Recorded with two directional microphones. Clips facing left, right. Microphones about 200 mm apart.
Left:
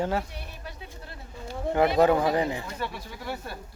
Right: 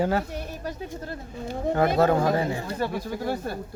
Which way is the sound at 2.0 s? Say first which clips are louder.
Even; 15° left (ahead or behind).